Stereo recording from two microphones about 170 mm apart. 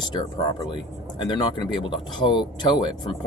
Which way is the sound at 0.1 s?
25° left (ahead or behind).